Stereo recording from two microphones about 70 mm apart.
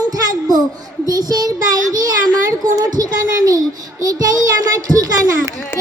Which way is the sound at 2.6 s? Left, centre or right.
Right.